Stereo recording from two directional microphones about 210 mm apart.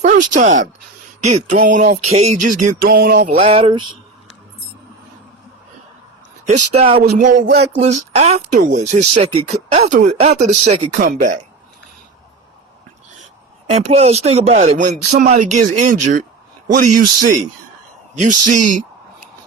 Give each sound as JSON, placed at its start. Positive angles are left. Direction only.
{"t": 0.0, "sound": "speech", "side_deg": -35}
{"t": 3.5, "sound": "speech", "side_deg": -25}
{"t": 6.4, "sound": "speech", "side_deg": -30}
{"t": 13.7, "sound": "speech", "side_deg": -30}